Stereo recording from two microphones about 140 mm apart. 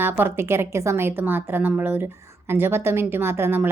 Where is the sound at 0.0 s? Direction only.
15° right (ahead or behind).